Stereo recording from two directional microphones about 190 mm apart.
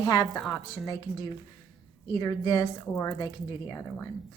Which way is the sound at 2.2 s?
20° left (ahead or behind).